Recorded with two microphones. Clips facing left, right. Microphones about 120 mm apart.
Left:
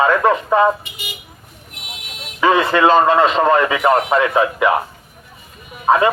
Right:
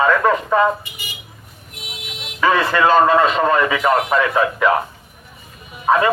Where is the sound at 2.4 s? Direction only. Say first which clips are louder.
Left 2 dB; 20° left (ahead or behind).